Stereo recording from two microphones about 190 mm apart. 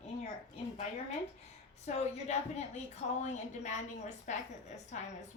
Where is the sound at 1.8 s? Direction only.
35° left (ahead or behind).